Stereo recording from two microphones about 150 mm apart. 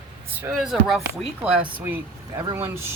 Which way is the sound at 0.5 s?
Centre (ahead or behind).